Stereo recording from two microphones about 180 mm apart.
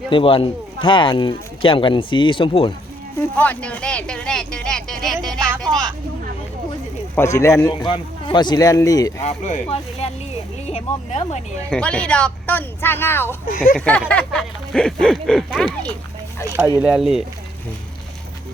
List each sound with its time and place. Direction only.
0.1 s speech: 30° left (ahead or behind)
3.2 s speech: 10° left (ahead or behind)
7.3 s speech: 15° left (ahead or behind)
10.7 s speech: 35° left (ahead or behind)
11.7 s speech: 5° left (ahead or behind)
13.4 s speech: 50° left (ahead or behind)
13.7 s speech: 5° left (ahead or behind)